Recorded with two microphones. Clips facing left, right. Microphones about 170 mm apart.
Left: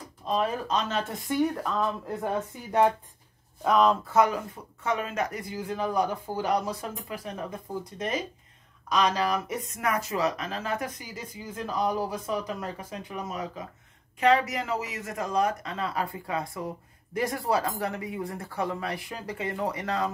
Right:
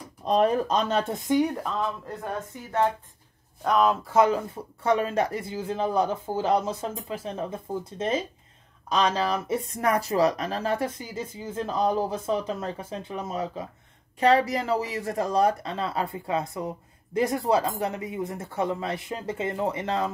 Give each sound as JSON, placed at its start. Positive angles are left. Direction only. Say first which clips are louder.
{"t": 0.3, "sound": "speech", "louder": "right 5 dB", "side_deg": -40}
{"t": 1.2, "sound": "speech", "louder": "even", "side_deg": -15}
{"t": 1.7, "sound": "speech", "louder": "left 1 dB", "side_deg": 5}
{"t": 3.6, "sound": "speech", "louder": "even", "side_deg": 0}
{"t": 4.1, "sound": "speech", "louder": "right 2 dB", "side_deg": -25}